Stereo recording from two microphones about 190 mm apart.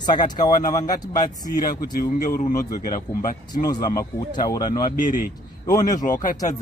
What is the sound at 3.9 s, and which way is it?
Speech, 20° left (ahead or behind).